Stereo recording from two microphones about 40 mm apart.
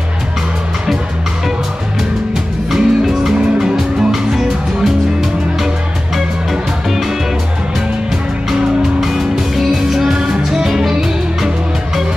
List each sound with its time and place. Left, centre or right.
2.7 s music: centre
6.1 s music: centre
9.0 s music: centre